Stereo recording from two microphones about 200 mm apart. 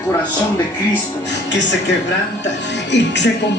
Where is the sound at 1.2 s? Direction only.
60° left (ahead or behind).